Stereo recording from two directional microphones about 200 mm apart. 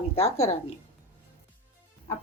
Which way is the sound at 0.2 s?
30° left (ahead or behind).